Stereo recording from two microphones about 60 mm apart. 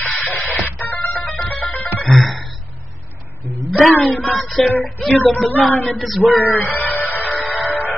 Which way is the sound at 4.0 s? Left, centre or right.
Left.